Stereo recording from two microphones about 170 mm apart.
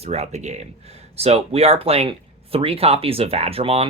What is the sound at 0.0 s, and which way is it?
Speech, 40° right (ahead or behind).